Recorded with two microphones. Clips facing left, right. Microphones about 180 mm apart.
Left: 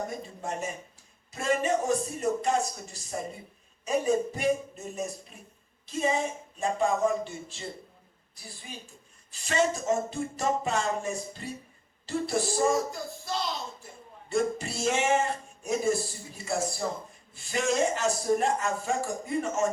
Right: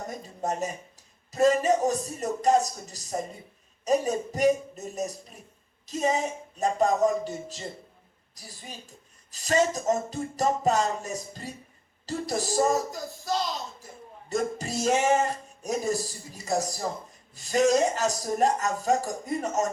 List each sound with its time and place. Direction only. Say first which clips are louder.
0.2 s speech: right 4 dB; 40° right (ahead or behind)
1.3 s music: right 5 dB; 40° right (ahead or behind)
5.8 s a woman's voice: right 2 dB; 40° right (ahead or behind)
6.6 s music: right 3 dB; 40° right (ahead or behind)
9.3 s music: right 3 dB; 40° right (ahead or behind)
14.3 s music: left 1 dB; 40° right (ahead or behind)